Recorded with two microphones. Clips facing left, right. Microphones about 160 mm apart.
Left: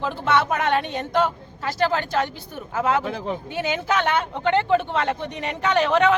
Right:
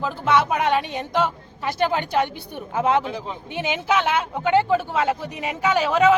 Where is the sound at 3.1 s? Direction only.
55° left (ahead or behind).